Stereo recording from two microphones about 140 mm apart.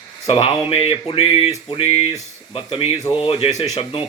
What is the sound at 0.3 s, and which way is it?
Speech, 45° left (ahead or behind).